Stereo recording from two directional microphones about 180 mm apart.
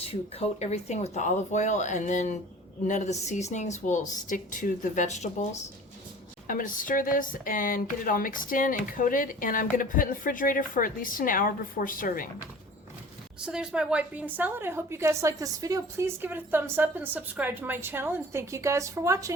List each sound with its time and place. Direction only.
0.0 s speech: 35° left (ahead or behind); by 12.3 s 50° left (ahead or behind)
13.4 s a woman's voice: 5° right (ahead or behind)